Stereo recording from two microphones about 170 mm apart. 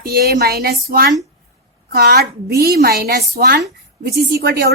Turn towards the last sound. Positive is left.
turn(degrees=-70)  # may be behind; listen again after turning